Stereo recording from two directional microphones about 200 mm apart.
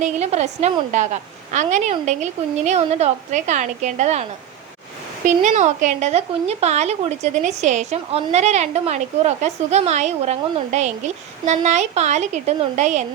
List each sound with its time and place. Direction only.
0.0 s speech: 35° right (ahead or behind)